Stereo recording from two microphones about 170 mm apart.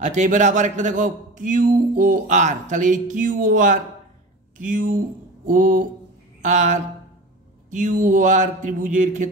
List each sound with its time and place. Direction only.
0.0 s a man's voice: 45° right (ahead or behind)